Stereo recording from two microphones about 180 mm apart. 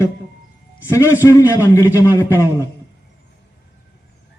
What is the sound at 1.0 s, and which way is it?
A man's voice, 10° right (ahead or behind).